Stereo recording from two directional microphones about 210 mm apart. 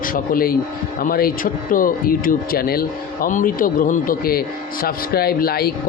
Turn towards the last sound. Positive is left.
turn(degrees=45)  # may be behind; listen again after turning